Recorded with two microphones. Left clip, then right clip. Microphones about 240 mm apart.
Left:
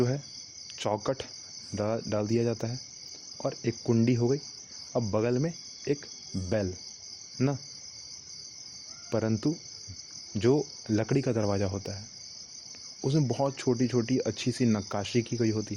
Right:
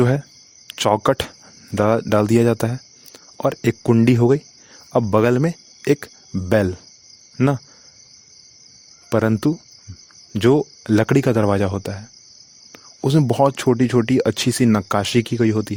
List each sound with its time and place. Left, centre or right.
0.7 s speech: right
4.9 s cricket: right
6.5 s speech: right
9.0 s speech: right